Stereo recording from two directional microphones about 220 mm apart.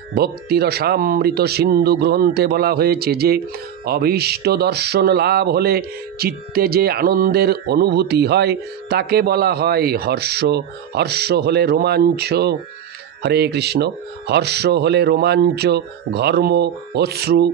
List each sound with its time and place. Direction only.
0.1 s speech: 45° right (ahead or behind)